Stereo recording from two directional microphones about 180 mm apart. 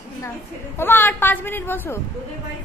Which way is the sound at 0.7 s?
10° left (ahead or behind).